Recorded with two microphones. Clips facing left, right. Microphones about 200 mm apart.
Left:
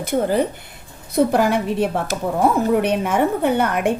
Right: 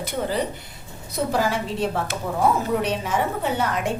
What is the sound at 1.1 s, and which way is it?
A woman's voice, 55° left (ahead or behind).